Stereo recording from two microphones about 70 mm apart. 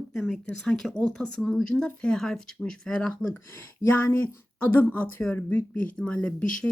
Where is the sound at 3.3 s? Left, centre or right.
Left.